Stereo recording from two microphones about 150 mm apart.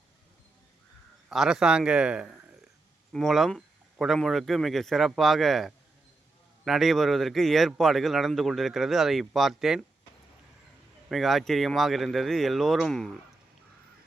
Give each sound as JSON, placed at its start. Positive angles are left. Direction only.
{"t": 1.3, "sound": "a man's voice", "side_deg": -5}
{"t": 11.1, "sound": "a man's voice", "side_deg": 0}